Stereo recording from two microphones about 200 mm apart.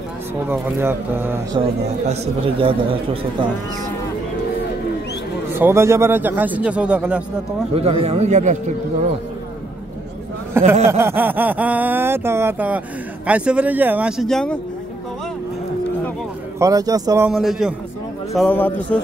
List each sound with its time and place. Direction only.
0.5 s speech: 10° right (ahead or behind)
2.0 s speech: 25° right (ahead or behind)
5.5 s speech: 10° right (ahead or behind)
7.7 s a man's voice: 30° right (ahead or behind)
10.6 s speech: 10° right (ahead or behind); by 14.6 s 5° left (ahead or behind)
16.5 s speech: 15° right (ahead or behind)
17.3 s speech: centre (ahead or behind)